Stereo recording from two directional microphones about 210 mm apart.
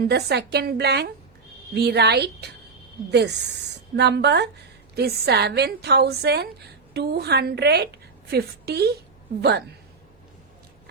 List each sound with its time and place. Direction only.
0.0 s a woman's voice: 50° right (ahead or behind)